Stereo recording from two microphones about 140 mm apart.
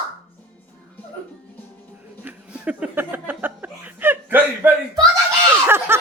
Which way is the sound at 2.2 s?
10° right (ahead or behind).